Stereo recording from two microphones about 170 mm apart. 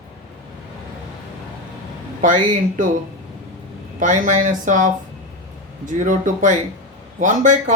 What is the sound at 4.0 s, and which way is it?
Speech, 50° right (ahead or behind).